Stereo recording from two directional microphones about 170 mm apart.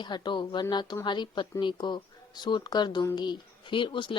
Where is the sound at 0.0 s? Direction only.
25° left (ahead or behind).